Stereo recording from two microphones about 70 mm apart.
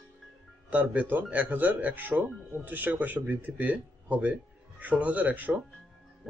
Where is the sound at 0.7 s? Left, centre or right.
Right.